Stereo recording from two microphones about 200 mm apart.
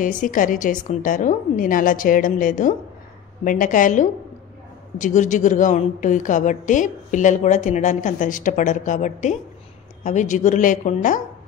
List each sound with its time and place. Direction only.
0.0 s a woman's voice: 40° left (ahead or behind)